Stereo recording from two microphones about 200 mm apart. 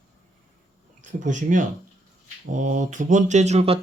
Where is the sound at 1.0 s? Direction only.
40° right (ahead or behind).